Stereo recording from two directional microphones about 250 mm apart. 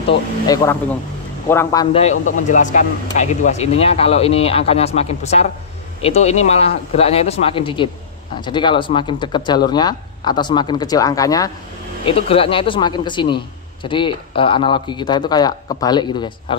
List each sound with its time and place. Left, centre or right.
1.5 s a man's voice: centre